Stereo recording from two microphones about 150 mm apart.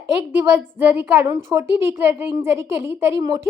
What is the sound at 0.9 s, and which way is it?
Speech, 20° right (ahead or behind).